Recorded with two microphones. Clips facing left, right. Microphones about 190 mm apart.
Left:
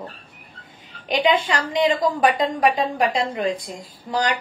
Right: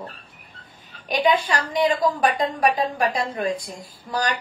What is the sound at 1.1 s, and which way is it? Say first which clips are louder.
A woman's voice: left 1 dB; 20° left (ahead or behind).